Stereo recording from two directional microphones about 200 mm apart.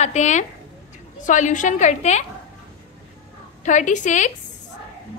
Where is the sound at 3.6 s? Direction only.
40° left (ahead or behind).